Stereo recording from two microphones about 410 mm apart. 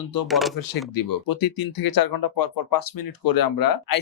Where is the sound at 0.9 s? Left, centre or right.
Left.